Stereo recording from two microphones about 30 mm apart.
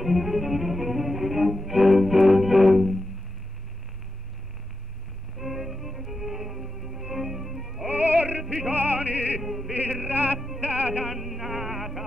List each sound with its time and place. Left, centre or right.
0.0 s cello: centre
5.4 s music: centre
7.9 s opera: right
8.7 s music: right
9.4 s opera: centre
10.0 s music: right
11.1 s music: centre